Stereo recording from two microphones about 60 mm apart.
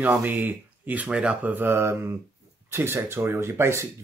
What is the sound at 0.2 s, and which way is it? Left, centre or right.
Speech, right.